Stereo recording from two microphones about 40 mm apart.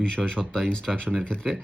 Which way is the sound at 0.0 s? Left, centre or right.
Left.